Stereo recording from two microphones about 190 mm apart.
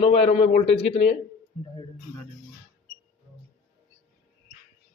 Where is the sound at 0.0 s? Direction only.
30° left (ahead or behind).